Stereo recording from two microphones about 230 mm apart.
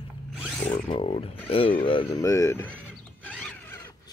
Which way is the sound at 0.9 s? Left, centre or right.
Left.